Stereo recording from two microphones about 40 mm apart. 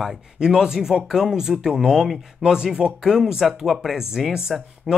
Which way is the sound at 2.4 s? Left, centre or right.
Right.